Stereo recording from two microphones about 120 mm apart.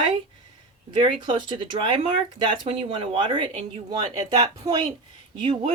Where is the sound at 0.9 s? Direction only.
40° right (ahead or behind).